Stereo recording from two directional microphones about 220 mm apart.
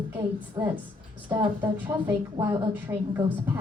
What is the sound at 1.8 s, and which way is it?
A woman's voice, 10° right (ahead or behind).